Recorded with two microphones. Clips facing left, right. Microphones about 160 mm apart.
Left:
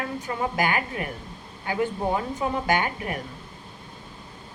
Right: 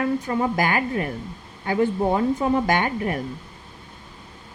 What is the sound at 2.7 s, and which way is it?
Speech, 35° right (ahead or behind).